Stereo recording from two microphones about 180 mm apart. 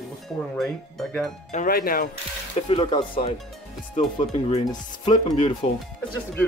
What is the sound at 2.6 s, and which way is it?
Speech, 25° left (ahead or behind).